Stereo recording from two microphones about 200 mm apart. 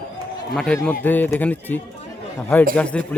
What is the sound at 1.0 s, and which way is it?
Speech, 10° left (ahead or behind).